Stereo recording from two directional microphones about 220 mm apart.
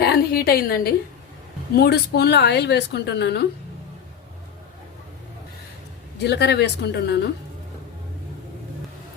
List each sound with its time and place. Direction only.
0.0 s a woman's voice: 45° left (ahead or behind)
6.1 s a woman's voice: 50° left (ahead or behind)